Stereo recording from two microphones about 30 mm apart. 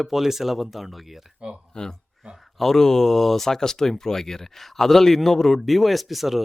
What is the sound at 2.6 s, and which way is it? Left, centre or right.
Speech, centre.